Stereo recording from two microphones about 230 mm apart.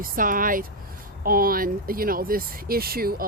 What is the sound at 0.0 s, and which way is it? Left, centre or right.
Speech, right.